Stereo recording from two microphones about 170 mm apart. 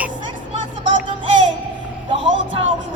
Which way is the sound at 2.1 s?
30° right (ahead or behind).